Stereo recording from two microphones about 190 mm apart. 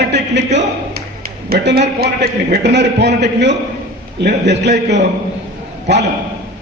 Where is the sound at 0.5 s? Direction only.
55° right (ahead or behind).